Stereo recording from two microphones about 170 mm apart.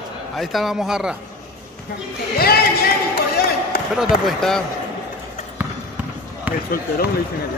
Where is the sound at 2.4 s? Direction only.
65° left (ahead or behind).